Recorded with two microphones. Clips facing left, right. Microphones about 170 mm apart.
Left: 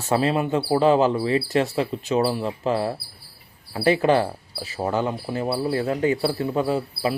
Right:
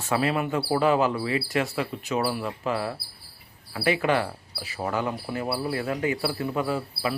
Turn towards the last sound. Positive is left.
turn(degrees=25)  # may be behind; listen again after turning